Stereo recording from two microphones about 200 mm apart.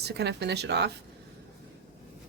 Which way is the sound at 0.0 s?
55° right (ahead or behind).